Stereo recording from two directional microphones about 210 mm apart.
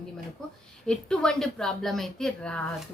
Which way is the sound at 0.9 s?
5° left (ahead or behind).